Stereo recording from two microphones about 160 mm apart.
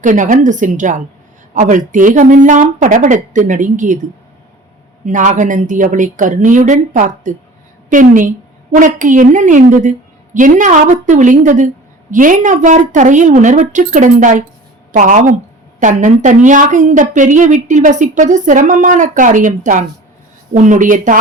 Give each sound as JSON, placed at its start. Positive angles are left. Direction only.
{"t": 0.0, "sound": "speech", "side_deg": -50}
{"t": 5.0, "sound": "a woman's voice", "side_deg": -50}